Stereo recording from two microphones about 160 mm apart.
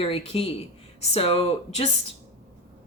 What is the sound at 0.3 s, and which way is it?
Speech, 35° left (ahead or behind).